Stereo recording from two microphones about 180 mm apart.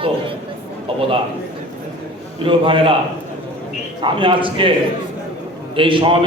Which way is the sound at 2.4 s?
30° right (ahead or behind).